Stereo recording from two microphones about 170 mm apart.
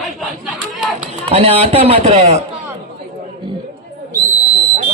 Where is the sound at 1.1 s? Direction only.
35° right (ahead or behind).